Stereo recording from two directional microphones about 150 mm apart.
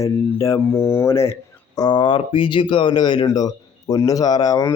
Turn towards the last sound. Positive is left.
turn(degrees=25)  # may be behind; listen again after turning